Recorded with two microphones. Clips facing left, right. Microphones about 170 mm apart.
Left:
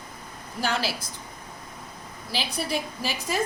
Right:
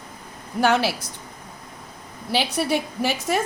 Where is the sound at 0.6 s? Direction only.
60° right (ahead or behind).